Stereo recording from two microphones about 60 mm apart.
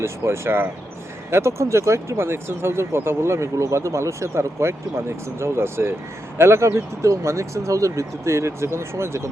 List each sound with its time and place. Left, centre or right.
0.0 s speech: right